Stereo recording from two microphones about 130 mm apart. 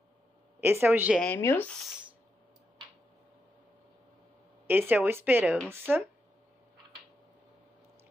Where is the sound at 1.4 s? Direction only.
15° left (ahead or behind).